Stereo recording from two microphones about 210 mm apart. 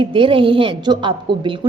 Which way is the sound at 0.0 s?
25° right (ahead or behind).